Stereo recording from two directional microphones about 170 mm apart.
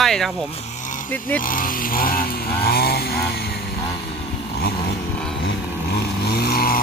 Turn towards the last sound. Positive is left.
turn(degrees=60)  # may be behind; listen again after turning